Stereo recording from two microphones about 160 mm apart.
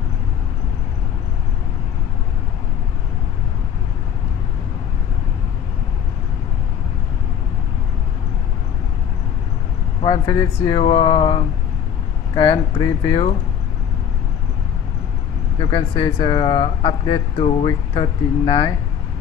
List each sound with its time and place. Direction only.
10.0 s speech: 25° left (ahead or behind)
15.6 s speech: 30° left (ahead or behind)